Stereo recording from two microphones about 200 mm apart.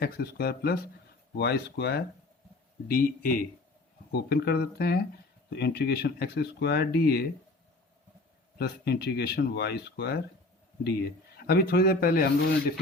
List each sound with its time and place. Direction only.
0.0 s speech: 50° left (ahead or behind)
8.5 s speech: 55° left (ahead or behind)